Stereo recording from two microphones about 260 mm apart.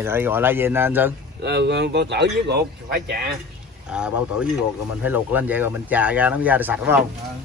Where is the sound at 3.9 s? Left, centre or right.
Centre.